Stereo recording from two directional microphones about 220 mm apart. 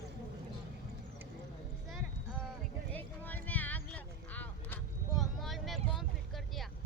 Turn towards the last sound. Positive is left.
turn(degrees=0)  # may be behind; listen again after turning